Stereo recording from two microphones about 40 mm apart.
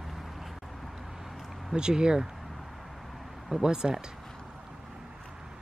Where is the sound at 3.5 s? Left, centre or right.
Centre.